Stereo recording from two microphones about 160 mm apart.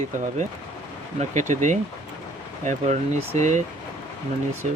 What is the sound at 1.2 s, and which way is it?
Speech, 50° right (ahead or behind).